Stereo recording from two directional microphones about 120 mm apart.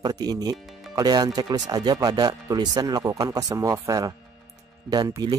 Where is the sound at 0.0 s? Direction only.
35° right (ahead or behind).